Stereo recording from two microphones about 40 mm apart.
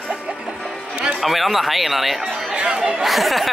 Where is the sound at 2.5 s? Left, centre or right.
Right.